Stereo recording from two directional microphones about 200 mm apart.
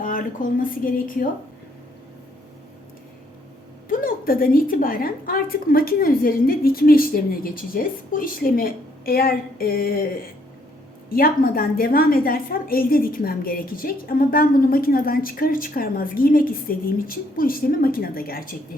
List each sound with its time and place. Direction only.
0.0 s speech: 45° left (ahead or behind)
3.8 s a woman's voice: 45° left (ahead or behind)